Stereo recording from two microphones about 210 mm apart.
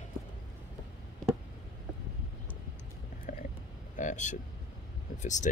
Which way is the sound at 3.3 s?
40° left (ahead or behind).